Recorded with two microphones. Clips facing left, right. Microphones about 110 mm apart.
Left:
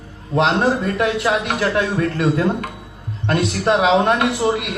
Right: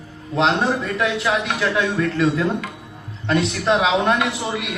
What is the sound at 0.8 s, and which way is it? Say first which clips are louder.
A man's voice: left 3 dB; 40° left (ahead or behind).